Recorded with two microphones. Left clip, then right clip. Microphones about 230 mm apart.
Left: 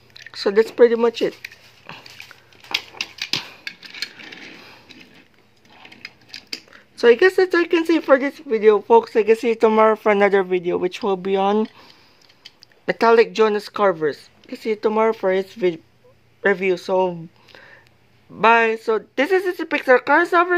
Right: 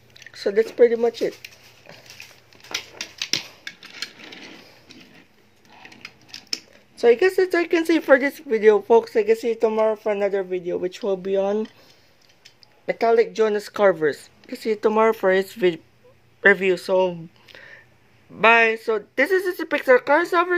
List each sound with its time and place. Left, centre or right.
0.1 s speech: centre
7.0 s speech: centre